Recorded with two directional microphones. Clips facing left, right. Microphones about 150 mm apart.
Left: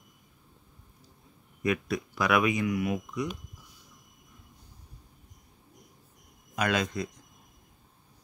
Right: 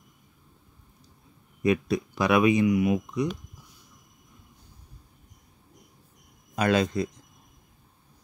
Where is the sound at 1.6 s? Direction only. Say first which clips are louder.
Right 5 dB; 25° right (ahead or behind).